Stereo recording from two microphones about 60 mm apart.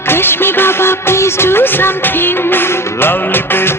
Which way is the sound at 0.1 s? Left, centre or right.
Left.